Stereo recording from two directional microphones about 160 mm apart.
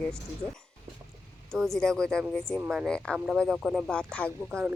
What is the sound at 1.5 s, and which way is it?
Speech, centre (ahead or behind).